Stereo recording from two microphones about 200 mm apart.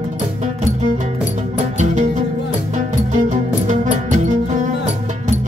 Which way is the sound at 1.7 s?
35° right (ahead or behind).